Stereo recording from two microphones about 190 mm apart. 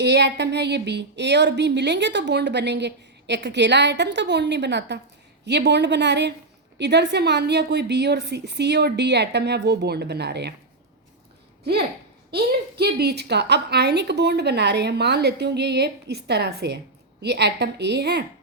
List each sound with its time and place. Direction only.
0.0 s speech: 60° right (ahead or behind)
11.6 s speech: 55° right (ahead or behind)